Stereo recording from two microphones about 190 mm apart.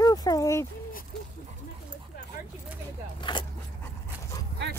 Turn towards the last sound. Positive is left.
turn(degrees=15)  # may be behind; listen again after turning